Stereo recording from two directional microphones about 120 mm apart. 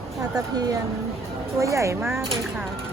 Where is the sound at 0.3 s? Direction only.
30° right (ahead or behind).